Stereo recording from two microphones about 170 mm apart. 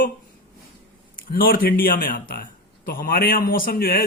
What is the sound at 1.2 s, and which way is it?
Speech, 55° left (ahead or behind).